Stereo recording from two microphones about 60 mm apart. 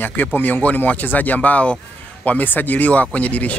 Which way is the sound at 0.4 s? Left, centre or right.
Left.